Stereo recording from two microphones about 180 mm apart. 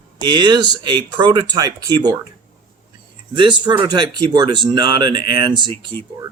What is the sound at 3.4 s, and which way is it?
Speech, 25° right (ahead or behind).